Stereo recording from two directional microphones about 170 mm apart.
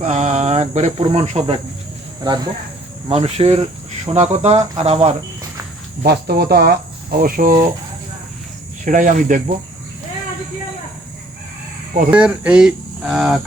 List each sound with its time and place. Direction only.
0.0 s speech: 45° right (ahead or behind)
2.2 s speech: 25° right (ahead or behind)
3.1 s speech: 35° right (ahead or behind)
6.1 s speech: 65° right (ahead or behind)
8.8 s speech: 50° right (ahead or behind)
12.1 s speech: 5° right (ahead or behind)